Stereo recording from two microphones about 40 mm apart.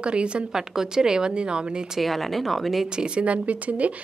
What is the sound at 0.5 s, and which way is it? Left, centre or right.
A woman's voice, centre.